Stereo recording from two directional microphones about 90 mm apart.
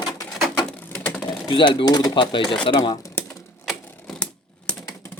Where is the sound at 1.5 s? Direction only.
70° left (ahead or behind).